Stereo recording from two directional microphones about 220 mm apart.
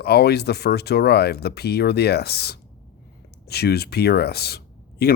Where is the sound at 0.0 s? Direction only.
45° left (ahead or behind).